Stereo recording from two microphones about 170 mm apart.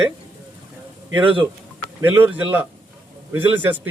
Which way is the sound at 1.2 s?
30° right (ahead or behind).